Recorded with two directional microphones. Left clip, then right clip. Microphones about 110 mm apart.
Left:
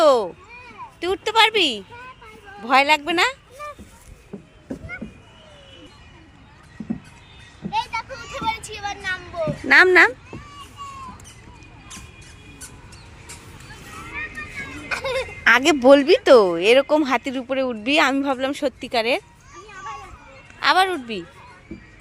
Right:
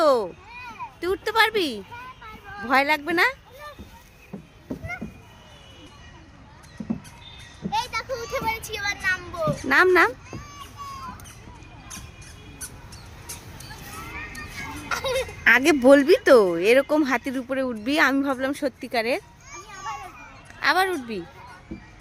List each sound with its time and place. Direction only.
0.0 s a sound: centre (ahead or behind)
1.0 s speech: 5° left (ahead or behind)
7.6 s children playing: 5° right (ahead or behind)
8.2 s vehicle: 10° left (ahead or behind)
9.6 s speech: 10° left (ahead or behind)
14.1 s vehicle: 5° right (ahead or behind)
15.2 s speech: 10° right (ahead or behind)
19.5 s children playing: 30° left (ahead or behind)
20.6 s speech: 5° left (ahead or behind)